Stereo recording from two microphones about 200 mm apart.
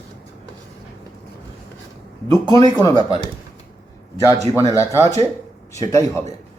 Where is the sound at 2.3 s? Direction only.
20° right (ahead or behind).